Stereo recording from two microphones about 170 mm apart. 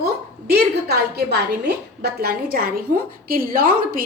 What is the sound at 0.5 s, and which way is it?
A woman's voice, 75° right (ahead or behind).